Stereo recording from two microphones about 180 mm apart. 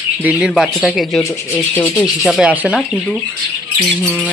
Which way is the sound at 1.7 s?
10° left (ahead or behind).